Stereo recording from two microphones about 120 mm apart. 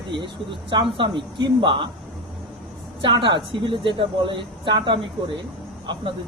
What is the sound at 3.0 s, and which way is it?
Speech, 40° right (ahead or behind).